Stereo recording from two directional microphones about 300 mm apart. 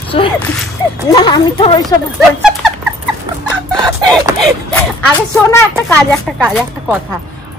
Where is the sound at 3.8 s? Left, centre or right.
Centre.